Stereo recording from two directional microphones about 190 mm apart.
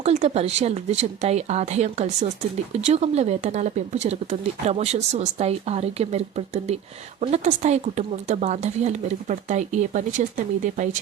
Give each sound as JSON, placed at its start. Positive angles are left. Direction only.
{"t": 0.0, "sound": "speech", "side_deg": -35}